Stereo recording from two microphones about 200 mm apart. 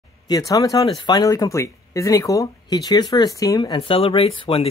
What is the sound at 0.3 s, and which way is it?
Speech, 15° left (ahead or behind).